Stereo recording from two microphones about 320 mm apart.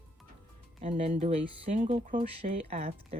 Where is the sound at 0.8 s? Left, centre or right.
Centre.